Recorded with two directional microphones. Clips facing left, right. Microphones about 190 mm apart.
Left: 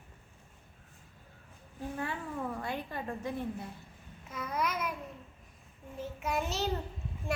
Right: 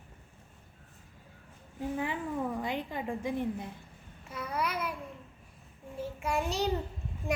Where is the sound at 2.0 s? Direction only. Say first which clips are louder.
Right 3 dB; 15° right (ahead or behind).